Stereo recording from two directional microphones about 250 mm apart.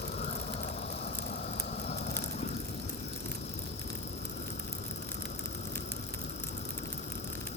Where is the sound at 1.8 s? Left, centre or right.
Left.